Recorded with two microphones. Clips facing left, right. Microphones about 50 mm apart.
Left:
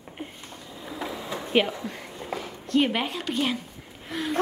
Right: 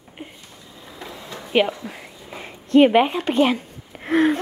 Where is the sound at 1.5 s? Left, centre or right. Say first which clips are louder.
Right 4 dB; centre.